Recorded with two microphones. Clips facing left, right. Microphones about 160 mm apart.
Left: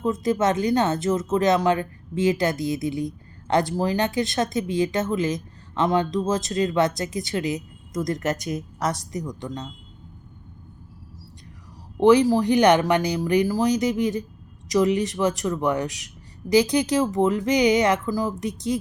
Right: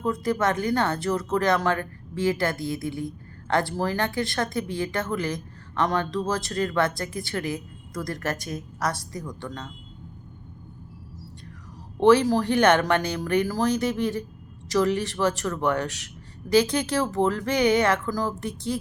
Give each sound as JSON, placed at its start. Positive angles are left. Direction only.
{"t": 0.0, "sound": "speech", "side_deg": 20}
{"t": 11.9, "sound": "speech", "side_deg": 15}